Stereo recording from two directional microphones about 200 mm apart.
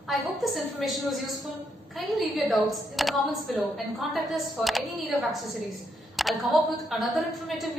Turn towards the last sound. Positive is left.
turn(degrees=0)  # may be behind; listen again after turning